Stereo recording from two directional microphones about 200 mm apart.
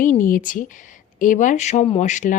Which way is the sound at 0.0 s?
40° left (ahead or behind).